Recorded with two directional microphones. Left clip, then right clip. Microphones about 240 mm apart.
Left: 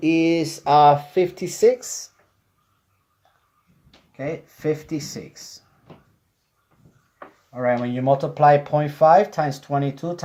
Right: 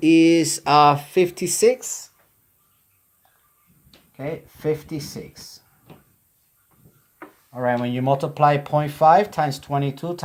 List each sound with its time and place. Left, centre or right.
0.0 s speech: right
4.2 s speech: centre
7.5 s speech: centre
7.9 s speech: right